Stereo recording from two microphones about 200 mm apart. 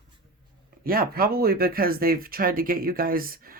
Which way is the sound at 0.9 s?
45° right (ahead or behind).